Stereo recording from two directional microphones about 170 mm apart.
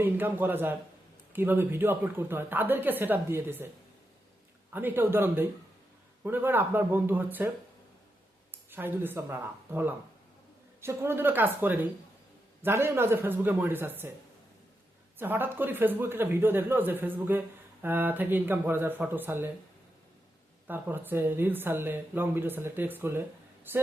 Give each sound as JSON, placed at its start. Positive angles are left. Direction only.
{"t": 0.0, "sound": "speech", "side_deg": -10}
{"t": 4.7, "sound": "speech", "side_deg": -10}
{"t": 8.7, "sound": "speech", "side_deg": -10}
{"t": 15.2, "sound": "speech", "side_deg": -10}
{"t": 20.7, "sound": "speech", "side_deg": -10}